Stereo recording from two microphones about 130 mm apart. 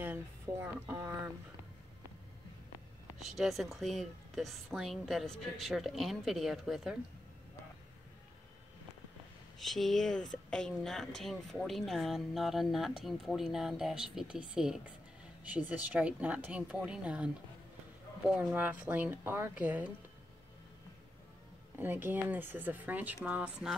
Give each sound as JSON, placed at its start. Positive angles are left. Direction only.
{"t": 0.0, "sound": "a sound", "side_deg": -15}
{"t": 3.2, "sound": "speech", "side_deg": 0}
{"t": 9.6, "sound": "speech", "side_deg": 0}
{"t": 21.7, "sound": "speech", "side_deg": -15}